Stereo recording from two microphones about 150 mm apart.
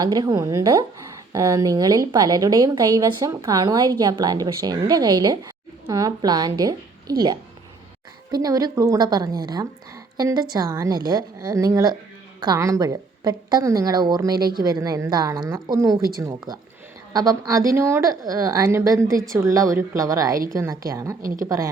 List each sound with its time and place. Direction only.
0.0 s a woman's voice: 25° right (ahead or behind)
21.2 s a woman's voice: 70° right (ahead or behind)